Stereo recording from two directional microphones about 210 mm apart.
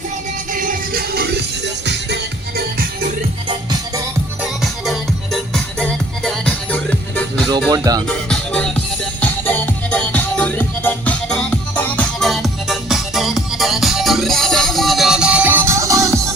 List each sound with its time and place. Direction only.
0.5 s music: 40° right (ahead or behind)
2.6 s music: 45° right (ahead or behind)
4.6 s music: centre (ahead or behind)
7.7 s music: 20° right (ahead or behind)
8.0 s music: 5° left (ahead or behind); by 16.3 s 15° right (ahead or behind)